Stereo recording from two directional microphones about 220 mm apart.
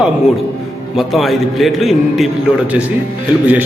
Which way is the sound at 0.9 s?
Centre (ahead or behind).